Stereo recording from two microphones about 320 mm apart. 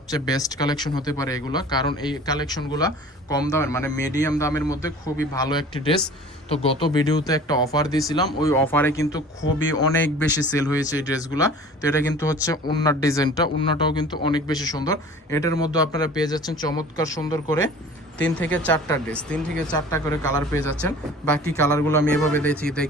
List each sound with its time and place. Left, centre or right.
0.1 s speech: centre
9.4 s speech: left
10.8 s speech: centre